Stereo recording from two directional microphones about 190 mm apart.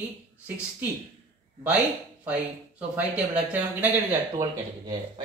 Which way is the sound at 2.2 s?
5° right (ahead or behind).